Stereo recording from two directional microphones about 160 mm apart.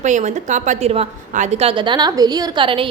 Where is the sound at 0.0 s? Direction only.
50° right (ahead or behind).